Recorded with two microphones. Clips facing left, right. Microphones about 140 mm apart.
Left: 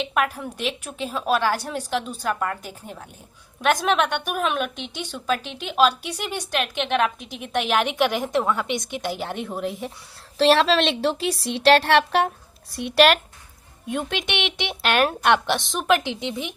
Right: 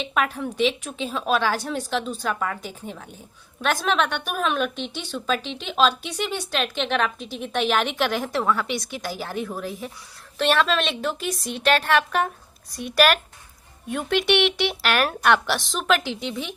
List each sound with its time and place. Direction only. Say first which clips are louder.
0.1 s speech: even; 10° left (ahead or behind)
3.6 s a woman's voice: left 2 dB; 15° left (ahead or behind)